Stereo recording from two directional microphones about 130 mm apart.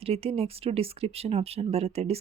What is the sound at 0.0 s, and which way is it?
Speech, 50° right (ahead or behind).